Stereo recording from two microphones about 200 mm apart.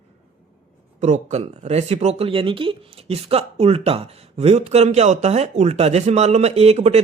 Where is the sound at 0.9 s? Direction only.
35° right (ahead or behind).